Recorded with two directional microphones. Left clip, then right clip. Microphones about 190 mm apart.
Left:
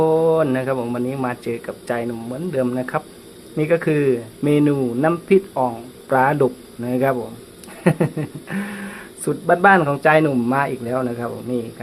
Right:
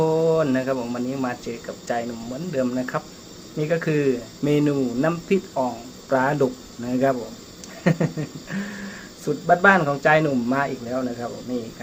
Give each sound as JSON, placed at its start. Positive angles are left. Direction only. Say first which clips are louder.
{"t": 0.0, "sound": "speech", "louder": "left 4 dB", "side_deg": 20}